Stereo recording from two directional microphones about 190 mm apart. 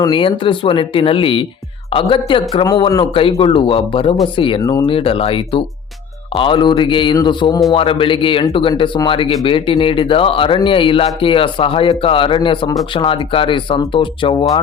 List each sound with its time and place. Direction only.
0.0 s speech: 25° left (ahead or behind)
4.9 s speech: 30° left (ahead or behind)